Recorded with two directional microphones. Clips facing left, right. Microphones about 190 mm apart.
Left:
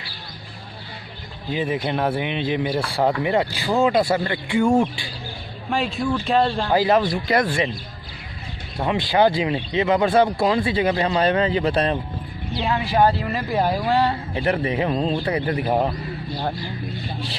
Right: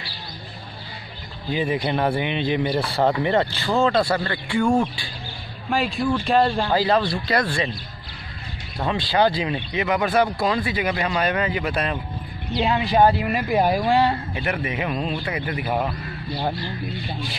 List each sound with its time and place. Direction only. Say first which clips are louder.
1.5 s speech: even; centre (ahead or behind); by 5.0 s 20° left (ahead or behind)
5.7 s speech: right 1 dB; centre (ahead or behind)
6.7 s speech: left 2 dB; 20° left (ahead or behind)
8.7 s speech: left 2 dB; 20° left (ahead or behind)
12.5 s speech: right 2 dB; 20° right (ahead or behind)
14.3 s a man's voice: left 4 dB; 35° left (ahead or behind)